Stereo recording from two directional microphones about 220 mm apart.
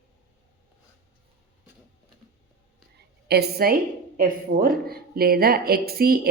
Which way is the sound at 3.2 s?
45° right (ahead or behind).